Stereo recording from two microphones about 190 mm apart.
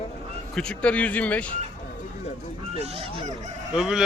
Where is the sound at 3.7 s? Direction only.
5° right (ahead or behind).